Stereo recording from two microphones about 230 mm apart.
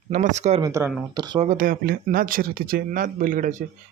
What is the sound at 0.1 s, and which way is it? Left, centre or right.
Speech, right.